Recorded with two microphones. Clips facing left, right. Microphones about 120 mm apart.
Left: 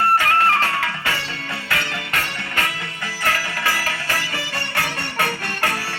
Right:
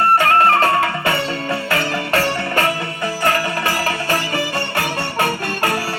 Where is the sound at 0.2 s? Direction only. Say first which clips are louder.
Right 5 dB; 35° right (ahead or behind).